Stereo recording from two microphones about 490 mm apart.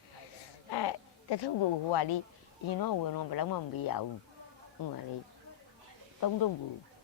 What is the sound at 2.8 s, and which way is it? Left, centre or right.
A man's voice, left.